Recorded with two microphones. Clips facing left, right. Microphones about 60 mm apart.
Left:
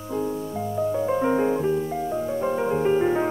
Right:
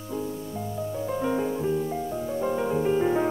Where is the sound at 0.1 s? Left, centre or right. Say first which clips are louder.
Left 5 dB; left.